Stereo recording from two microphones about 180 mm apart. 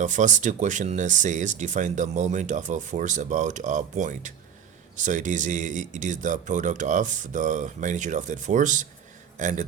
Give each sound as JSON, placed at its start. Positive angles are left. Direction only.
{"t": 0.0, "sound": "speech", "side_deg": -45}